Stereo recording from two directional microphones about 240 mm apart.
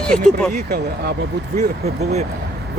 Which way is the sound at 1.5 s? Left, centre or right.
Right.